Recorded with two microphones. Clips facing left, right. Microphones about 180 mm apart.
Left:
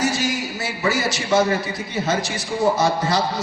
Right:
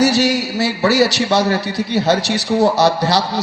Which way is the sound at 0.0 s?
70° right (ahead or behind).